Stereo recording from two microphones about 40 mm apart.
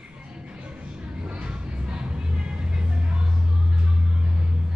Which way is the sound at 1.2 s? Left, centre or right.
Right.